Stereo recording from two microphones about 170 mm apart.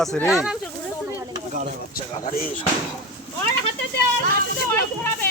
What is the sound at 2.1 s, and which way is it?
Speech, 50° left (ahead or behind).